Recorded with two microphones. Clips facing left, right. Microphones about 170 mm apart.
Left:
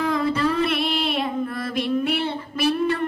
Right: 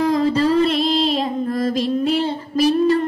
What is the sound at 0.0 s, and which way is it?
Music, 35° right (ahead or behind).